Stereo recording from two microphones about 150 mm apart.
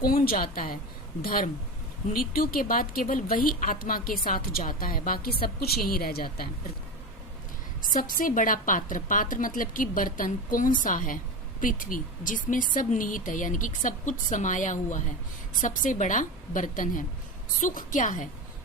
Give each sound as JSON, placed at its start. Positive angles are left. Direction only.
{"t": 0.0, "sound": "speech", "side_deg": 75}
{"t": 7.8, "sound": "a woman's voice", "side_deg": 65}